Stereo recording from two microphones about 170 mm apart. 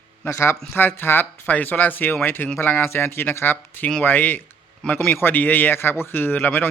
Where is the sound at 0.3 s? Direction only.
15° left (ahead or behind).